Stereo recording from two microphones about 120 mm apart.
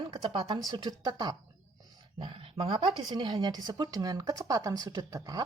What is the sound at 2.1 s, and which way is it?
Speech, 45° right (ahead or behind).